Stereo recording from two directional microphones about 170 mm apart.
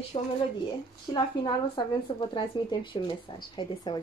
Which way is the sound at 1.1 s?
30° left (ahead or behind).